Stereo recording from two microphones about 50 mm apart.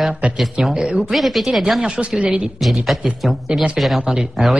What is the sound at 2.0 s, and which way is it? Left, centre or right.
Speech, right.